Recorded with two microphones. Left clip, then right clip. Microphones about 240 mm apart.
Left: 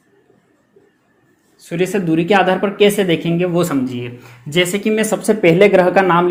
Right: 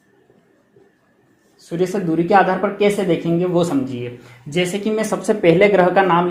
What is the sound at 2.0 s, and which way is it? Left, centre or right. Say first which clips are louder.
Speech: even; left.